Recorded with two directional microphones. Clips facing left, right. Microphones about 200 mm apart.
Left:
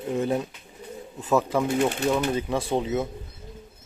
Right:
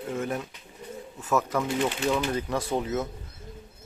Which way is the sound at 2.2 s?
20° left (ahead or behind).